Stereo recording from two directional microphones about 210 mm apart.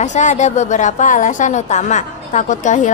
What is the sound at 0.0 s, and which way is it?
A woman's voice, 35° left (ahead or behind).